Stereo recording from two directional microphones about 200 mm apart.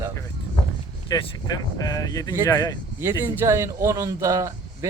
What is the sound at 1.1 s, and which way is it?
Speech, 20° left (ahead or behind).